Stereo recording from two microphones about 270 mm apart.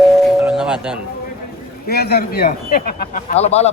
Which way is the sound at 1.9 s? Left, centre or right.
Left.